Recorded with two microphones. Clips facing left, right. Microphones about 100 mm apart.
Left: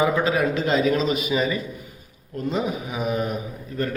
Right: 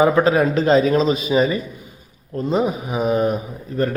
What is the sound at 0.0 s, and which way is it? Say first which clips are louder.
A man's voice: right 6 dB; 40° right (ahead or behind).